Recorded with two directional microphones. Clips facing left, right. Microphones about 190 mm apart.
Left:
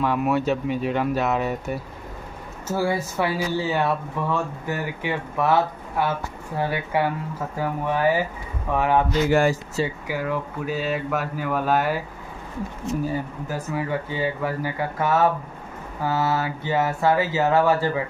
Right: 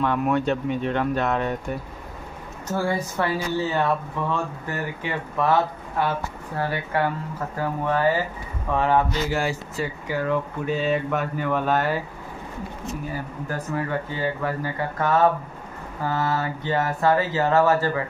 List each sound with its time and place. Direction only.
0.0 s speech: 5° left (ahead or behind)
9.3 s speech: 50° left (ahead or behind)
10.0 s speech: 10° left (ahead or behind)
13.5 s speech: 10° left (ahead or behind)